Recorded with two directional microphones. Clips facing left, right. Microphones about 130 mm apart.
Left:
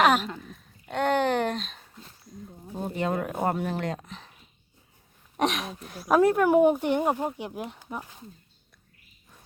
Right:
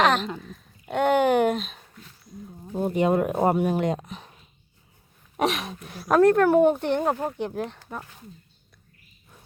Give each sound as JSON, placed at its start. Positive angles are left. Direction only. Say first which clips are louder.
{"t": 0.0, "sound": "a sound", "louder": "even", "side_deg": 5}
{"t": 2.7, "sound": "speech", "louder": "right 7 dB", "side_deg": -15}
{"t": 5.4, "sound": "speech", "louder": "right 2 dB", "side_deg": 0}